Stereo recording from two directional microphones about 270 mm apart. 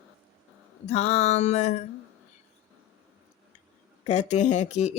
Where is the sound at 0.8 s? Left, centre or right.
Left.